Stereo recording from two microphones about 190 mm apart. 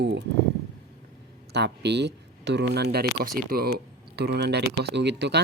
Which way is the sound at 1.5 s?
65° right (ahead or behind).